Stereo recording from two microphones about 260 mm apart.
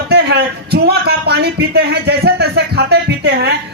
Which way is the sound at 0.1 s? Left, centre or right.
Right.